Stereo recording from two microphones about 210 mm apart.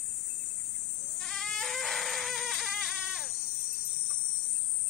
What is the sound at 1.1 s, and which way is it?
Goat, centre (ahead or behind).